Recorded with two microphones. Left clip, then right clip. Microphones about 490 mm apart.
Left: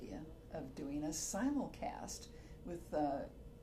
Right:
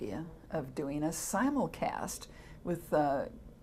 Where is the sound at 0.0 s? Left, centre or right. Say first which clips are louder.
Right 10 dB; right.